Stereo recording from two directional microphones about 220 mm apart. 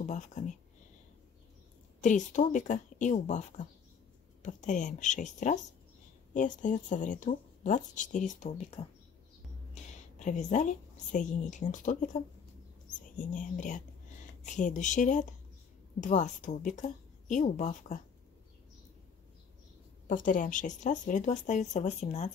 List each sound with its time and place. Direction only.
0.0 s speech: 35° left (ahead or behind)
2.0 s speech: 35° left (ahead or behind)
9.9 s speech: 35° left (ahead or behind)
20.1 s speech: 35° left (ahead or behind)